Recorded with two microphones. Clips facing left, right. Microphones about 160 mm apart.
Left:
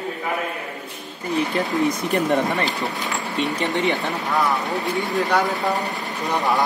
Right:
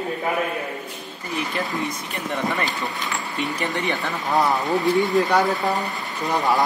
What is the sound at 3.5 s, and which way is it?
Speech, 20° left (ahead or behind).